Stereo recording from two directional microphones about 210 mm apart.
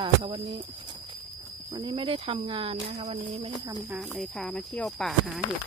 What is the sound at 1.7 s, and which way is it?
Speech, 20° right (ahead or behind).